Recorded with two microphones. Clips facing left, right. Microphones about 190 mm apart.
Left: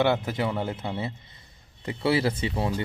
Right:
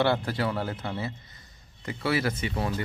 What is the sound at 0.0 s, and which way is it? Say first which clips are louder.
Speech: left 1 dB; 15° left (ahead or behind).